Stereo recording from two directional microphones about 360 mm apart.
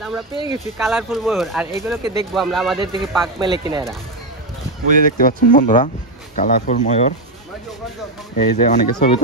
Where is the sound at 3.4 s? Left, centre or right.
Centre.